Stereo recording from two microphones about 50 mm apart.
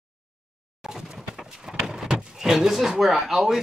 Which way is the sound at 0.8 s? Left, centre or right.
Centre.